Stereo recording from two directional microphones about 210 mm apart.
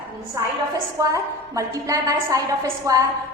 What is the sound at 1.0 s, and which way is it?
A woman's voice, 15° right (ahead or behind).